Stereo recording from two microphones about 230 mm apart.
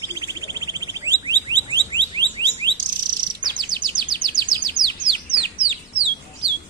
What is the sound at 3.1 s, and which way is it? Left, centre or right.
Chirp, centre.